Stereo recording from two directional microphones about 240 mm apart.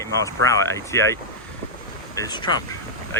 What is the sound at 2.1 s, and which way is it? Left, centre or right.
Speech, centre.